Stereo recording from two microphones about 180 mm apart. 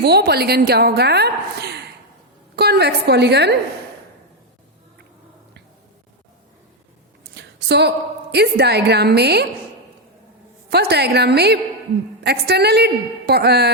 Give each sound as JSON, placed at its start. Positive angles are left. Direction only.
{"t": 0.0, "sound": "a woman's voice", "side_deg": -65}
{"t": 7.3, "sound": "a woman's voice", "side_deg": -70}
{"t": 10.7, "sound": "a woman's voice", "side_deg": -65}